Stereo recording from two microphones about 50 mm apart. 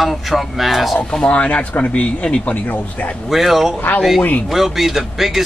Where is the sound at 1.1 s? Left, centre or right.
Left.